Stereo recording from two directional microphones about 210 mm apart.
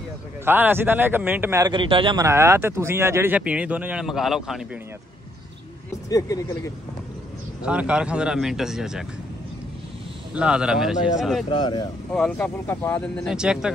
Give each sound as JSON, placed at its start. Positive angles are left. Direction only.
{"t": 0.5, "sound": "a man's voice", "side_deg": -10}
{"t": 6.0, "sound": "speech", "side_deg": 15}
{"t": 7.6, "sound": "speech", "side_deg": -5}
{"t": 10.3, "sound": "speech", "side_deg": -5}
{"t": 11.4, "sound": "speech", "side_deg": 20}
{"t": 12.1, "sound": "speech", "side_deg": 5}